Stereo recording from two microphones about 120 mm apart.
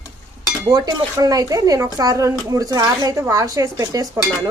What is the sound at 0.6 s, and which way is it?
Speech, 35° right (ahead or behind).